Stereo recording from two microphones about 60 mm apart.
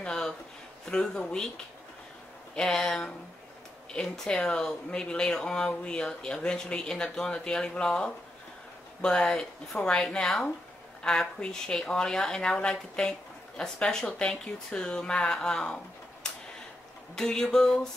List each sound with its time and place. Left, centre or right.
0.0 s a sound: centre
0.8 s speech: centre
2.5 s speech: centre